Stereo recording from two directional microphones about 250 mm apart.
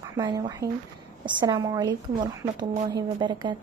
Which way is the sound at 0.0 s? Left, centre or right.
Centre.